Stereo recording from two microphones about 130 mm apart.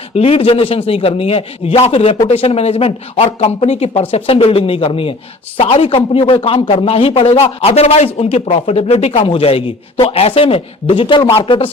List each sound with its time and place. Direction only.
0.1 s a man's voice: 45° left (ahead or behind)